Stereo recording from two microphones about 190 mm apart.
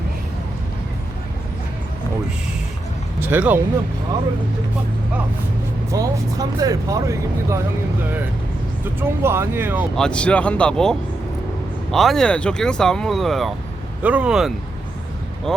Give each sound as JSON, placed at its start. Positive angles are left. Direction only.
{"t": 3.2, "sound": "speech", "side_deg": -10}
{"t": 5.9, "sound": "speech", "side_deg": -20}
{"t": 8.8, "sound": "speech", "side_deg": -10}
{"t": 9.9, "sound": "speech", "side_deg": 5}